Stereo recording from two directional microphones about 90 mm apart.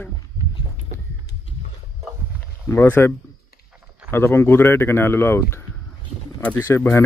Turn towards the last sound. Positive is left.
turn(degrees=30)  # may be behind; listen again after turning